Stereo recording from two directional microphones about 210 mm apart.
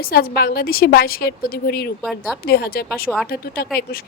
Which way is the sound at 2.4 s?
45° left (ahead or behind).